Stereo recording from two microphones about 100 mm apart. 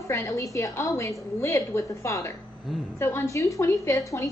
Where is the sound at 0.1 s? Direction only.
35° left (ahead or behind).